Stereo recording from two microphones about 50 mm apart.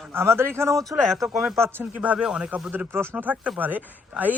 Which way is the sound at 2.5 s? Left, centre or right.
Right.